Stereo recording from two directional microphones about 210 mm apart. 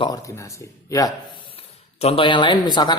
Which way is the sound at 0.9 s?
15° left (ahead or behind).